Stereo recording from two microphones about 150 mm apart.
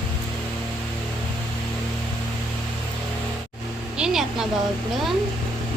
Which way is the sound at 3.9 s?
5° right (ahead or behind).